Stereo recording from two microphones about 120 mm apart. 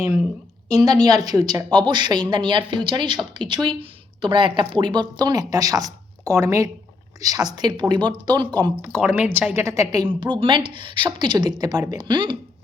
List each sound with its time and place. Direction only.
0.7 s a woman's voice: 30° right (ahead or behind)
9.0 s a woman's voice: 10° right (ahead or behind); by 12.4 s 40° right (ahead or behind)